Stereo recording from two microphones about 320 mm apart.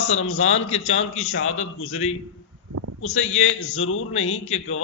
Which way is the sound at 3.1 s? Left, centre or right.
Left.